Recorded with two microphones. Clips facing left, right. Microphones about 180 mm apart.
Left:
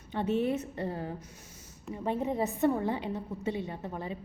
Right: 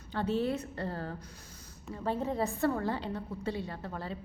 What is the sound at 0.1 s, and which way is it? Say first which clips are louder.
A woman's voice: left 2 dB; 25° left (ahead or behind).